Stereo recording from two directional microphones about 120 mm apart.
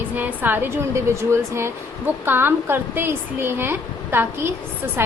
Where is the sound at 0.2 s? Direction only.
15° right (ahead or behind).